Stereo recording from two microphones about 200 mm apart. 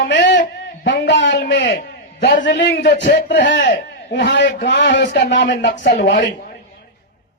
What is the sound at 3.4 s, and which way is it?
A man's voice, 45° left (ahead or behind).